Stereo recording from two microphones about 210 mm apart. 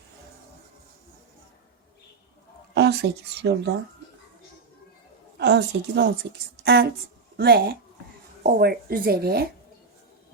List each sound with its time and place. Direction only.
2.7 s speech: 50° right (ahead or behind)
5.4 s a woman's voice: 55° right (ahead or behind)